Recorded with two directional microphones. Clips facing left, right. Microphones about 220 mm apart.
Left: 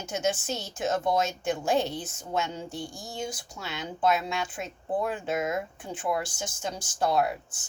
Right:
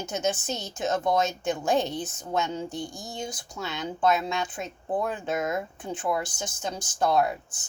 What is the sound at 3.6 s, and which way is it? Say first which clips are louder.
A woman's voice: right 2 dB; 5° left (ahead or behind).